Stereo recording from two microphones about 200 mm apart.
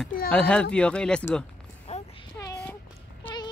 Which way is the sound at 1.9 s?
35° left (ahead or behind).